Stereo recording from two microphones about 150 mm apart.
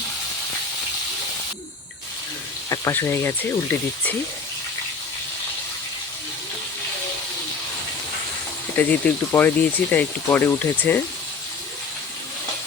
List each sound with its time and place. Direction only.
2.6 s speech: 20° left (ahead or behind)
8.8 s speech: 10° left (ahead or behind)